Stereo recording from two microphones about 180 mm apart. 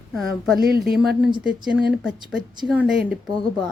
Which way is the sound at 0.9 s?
5° right (ahead or behind).